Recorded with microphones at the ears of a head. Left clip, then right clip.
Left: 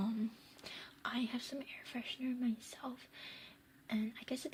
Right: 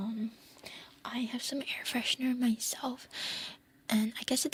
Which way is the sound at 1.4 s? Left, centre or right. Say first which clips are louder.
Right 11 dB; right.